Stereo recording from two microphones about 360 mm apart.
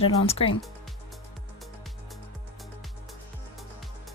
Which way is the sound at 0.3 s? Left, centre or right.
Centre.